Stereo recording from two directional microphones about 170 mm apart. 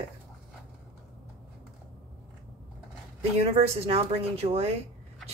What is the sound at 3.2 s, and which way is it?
Speech, 35° right (ahead or behind).